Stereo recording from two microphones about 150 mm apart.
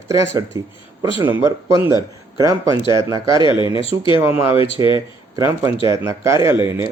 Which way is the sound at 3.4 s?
30° left (ahead or behind).